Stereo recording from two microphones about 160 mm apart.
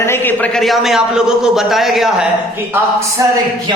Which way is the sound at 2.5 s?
15° right (ahead or behind).